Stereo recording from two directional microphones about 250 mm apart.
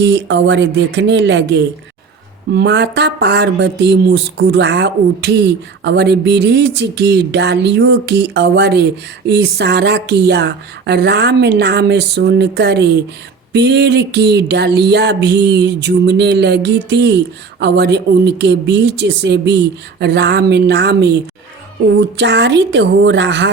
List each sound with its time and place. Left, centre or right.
0.0 s speech: right
13.5 s a sound: right
17.6 s speech: right
22.2 s speech: right